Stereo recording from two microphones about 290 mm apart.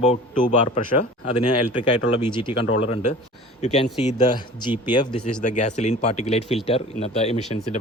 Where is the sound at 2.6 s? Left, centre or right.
Left.